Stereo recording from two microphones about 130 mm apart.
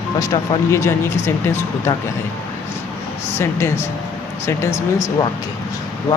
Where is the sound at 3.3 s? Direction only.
20° left (ahead or behind).